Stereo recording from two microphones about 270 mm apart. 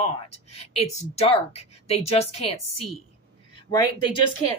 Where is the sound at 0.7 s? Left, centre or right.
Left.